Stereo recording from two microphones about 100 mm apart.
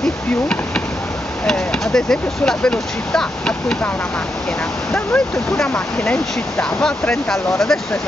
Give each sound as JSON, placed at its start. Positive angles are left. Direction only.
{"t": 1.4, "sound": "speech", "side_deg": 5}
{"t": 5.1, "sound": "speech", "side_deg": 10}